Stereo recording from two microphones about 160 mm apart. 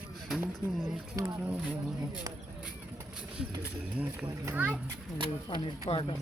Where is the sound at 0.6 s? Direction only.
20° left (ahead or behind).